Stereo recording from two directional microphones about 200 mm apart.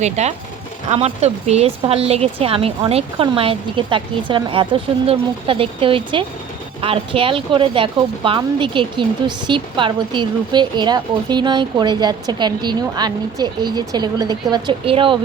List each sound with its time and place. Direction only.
0.0 s speech: 35° right (ahead or behind)